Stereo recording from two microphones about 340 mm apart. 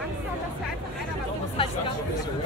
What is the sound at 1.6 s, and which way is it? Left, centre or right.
Chatter, centre.